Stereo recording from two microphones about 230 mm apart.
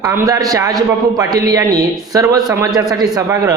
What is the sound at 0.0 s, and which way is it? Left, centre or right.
A man's voice, centre.